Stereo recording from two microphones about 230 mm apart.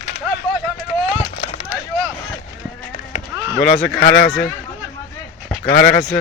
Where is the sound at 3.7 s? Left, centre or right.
Centre.